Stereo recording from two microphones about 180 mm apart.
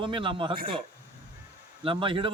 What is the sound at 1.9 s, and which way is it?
Speech, 30° right (ahead or behind).